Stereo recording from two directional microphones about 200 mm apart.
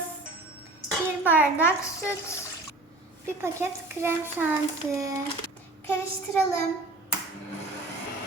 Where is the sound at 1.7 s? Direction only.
15° left (ahead or behind).